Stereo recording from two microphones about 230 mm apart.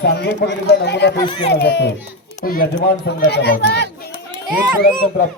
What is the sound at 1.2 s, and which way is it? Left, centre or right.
Speech, left.